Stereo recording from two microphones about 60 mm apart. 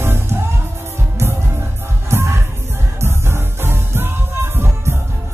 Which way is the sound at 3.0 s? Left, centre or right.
Right.